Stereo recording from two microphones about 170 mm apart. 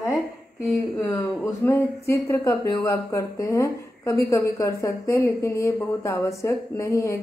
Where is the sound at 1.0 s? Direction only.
15° left (ahead or behind).